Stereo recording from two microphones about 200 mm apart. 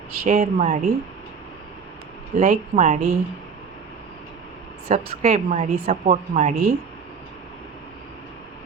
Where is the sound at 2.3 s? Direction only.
35° right (ahead or behind).